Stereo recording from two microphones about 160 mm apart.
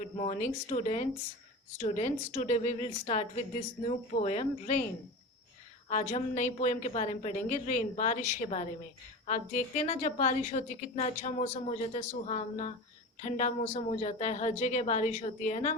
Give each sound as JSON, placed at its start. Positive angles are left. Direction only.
{"t": 0.2, "sound": "a woman's voice", "side_deg": 45}
{"t": 5.9, "sound": "a woman's voice", "side_deg": 45}